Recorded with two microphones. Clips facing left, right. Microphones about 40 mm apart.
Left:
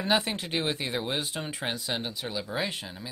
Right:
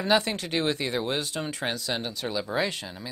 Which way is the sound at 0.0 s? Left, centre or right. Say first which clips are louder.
Right 3 dB; centre.